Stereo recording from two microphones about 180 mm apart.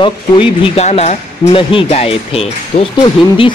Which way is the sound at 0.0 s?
30° left (ahead or behind).